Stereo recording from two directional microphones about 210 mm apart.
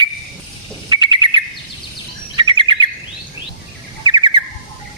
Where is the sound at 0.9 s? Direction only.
20° right (ahead or behind).